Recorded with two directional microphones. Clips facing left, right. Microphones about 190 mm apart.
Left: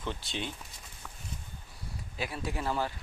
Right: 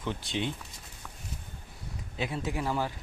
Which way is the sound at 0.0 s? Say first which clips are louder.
Right 4 dB; 15° right (ahead or behind).